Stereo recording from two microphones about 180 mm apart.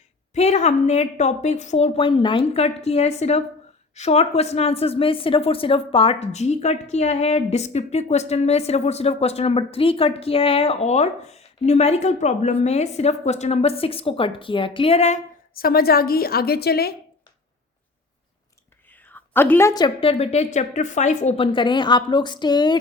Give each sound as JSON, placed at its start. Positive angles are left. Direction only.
{"t": 0.3, "sound": "speech", "side_deg": 40}
{"t": 15.5, "sound": "a woman's voice", "side_deg": 55}
{"t": 18.9, "sound": "a woman's voice", "side_deg": 10}